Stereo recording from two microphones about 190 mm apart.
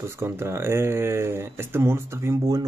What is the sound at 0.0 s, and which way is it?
Speech, 15° right (ahead or behind).